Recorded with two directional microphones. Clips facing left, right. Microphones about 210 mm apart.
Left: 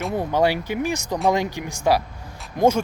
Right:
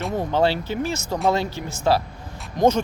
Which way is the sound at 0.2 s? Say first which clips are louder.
Even; 10° left (ahead or behind).